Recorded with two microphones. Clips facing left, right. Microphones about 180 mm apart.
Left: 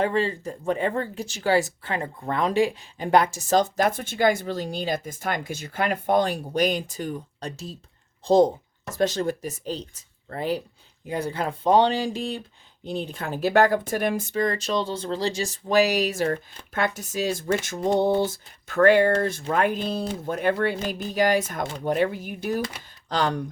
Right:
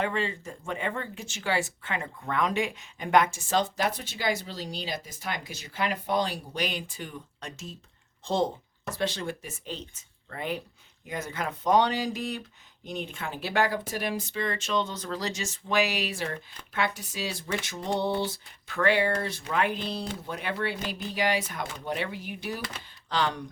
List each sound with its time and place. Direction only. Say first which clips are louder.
0.0 s speech: left 6 dB; 35° left (ahead or behind)